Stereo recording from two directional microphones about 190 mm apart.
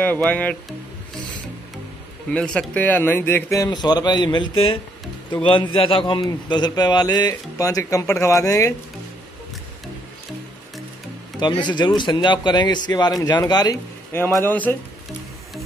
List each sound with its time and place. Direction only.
0.0 s a man's voice: 10° left (ahead or behind)
2.3 s a man's voice: 5° left (ahead or behind)
11.3 s a man's voice: 25° left (ahead or behind)